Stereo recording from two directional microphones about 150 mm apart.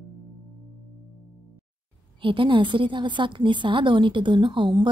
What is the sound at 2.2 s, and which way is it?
A woman's voice, 35° right (ahead or behind).